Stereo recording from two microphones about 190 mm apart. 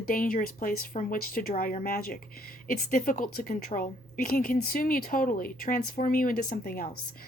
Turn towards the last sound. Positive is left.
turn(degrees=50)  # may be behind; listen again after turning